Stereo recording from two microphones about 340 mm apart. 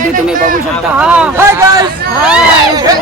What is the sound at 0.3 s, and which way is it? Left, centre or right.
Speech, right.